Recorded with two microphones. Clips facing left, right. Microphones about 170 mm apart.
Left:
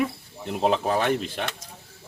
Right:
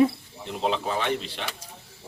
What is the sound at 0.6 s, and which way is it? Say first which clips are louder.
Speech: left 4 dB; 45° left (ahead or behind).